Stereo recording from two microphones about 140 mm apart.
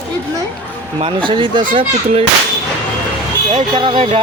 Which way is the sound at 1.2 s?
35° right (ahead or behind).